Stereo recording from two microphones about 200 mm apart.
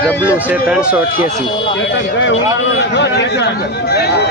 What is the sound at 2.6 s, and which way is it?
Speech, 60° left (ahead or behind).